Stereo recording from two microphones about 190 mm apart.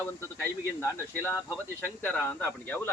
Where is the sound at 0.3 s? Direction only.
10° left (ahead or behind).